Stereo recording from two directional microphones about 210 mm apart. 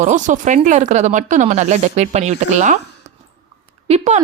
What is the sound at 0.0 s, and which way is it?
Speech, 35° right (ahead or behind).